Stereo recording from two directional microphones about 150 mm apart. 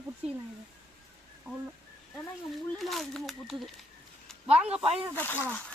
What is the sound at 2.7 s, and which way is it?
Speech, centre (ahead or behind).